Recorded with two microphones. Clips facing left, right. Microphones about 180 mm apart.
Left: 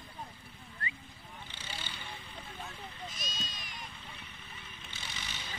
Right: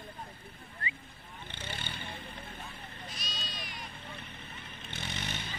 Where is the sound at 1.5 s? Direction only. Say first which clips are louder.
Right 5 dB; 55° right (ahead or behind).